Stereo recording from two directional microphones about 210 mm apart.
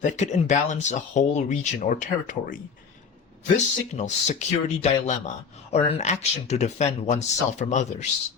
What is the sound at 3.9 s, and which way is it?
Speech, 35° left (ahead or behind).